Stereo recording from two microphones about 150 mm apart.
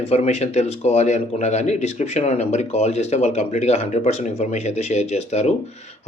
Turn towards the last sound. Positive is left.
turn(degrees=50)  # may be behind; listen again after turning